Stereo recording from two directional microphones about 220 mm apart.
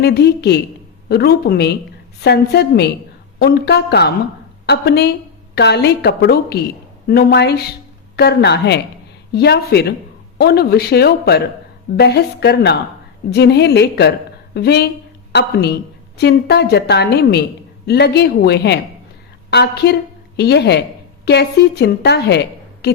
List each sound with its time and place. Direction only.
0.0 s a woman's voice: 50° left (ahead or behind)